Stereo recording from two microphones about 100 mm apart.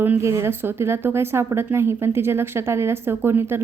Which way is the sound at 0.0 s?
25° right (ahead or behind).